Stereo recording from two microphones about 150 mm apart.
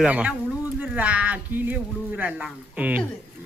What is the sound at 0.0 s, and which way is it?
Speech, 10° right (ahead or behind).